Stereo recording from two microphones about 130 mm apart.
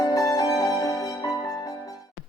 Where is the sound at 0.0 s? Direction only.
25° left (ahead or behind).